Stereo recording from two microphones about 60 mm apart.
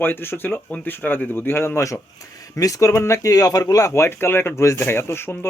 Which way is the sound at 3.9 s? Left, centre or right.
Left.